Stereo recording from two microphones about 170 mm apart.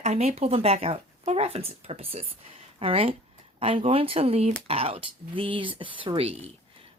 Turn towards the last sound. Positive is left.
turn(degrees=-35)  # may be behind; listen again after turning